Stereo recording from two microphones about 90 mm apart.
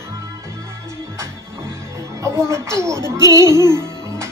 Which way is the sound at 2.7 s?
30° right (ahead or behind).